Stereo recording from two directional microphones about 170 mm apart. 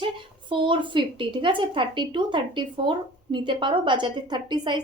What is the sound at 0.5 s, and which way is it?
A woman's voice, 30° right (ahead or behind).